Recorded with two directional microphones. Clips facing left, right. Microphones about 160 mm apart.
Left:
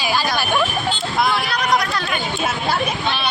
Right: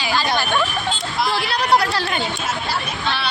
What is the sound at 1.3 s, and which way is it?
Speech, 30° right (ahead or behind).